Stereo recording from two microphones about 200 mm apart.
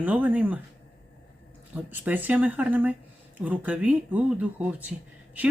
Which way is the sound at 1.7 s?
10° right (ahead or behind).